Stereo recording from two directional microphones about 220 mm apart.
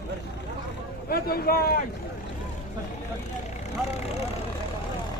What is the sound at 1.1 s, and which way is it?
Speech, 45° left (ahead or behind).